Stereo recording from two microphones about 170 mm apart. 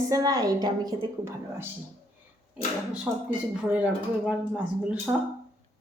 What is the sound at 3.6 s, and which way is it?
Speech, 5° right (ahead or behind).